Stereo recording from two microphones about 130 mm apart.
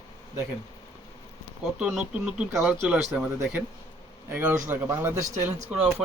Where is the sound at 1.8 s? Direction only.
5° right (ahead or behind).